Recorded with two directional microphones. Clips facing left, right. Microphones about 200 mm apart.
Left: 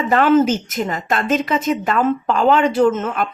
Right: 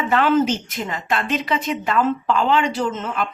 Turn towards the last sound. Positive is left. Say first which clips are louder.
# left 7 dB
turn(degrees=50)  # may be behind; listen again after turning